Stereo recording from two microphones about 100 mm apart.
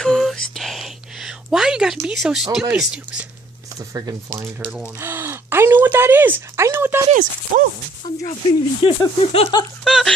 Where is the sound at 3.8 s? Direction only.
35° right (ahead or behind).